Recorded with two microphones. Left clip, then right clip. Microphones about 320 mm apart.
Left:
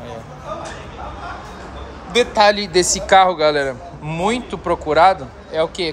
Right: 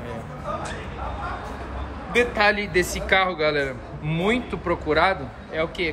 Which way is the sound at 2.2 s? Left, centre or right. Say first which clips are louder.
Left 6 dB; centre.